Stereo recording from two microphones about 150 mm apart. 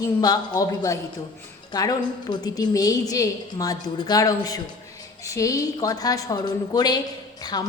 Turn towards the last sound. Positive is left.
turn(degrees=25)  # may be behind; listen again after turning